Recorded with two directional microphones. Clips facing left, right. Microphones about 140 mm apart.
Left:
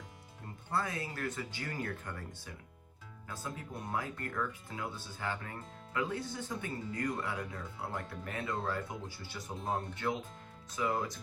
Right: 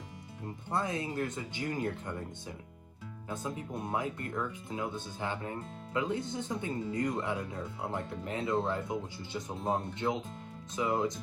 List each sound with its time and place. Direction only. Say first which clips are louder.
0.7 s speech: right 3 dB; 20° right (ahead or behind)